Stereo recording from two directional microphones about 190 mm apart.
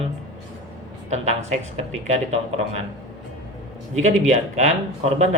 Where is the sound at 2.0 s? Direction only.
35° right (ahead or behind).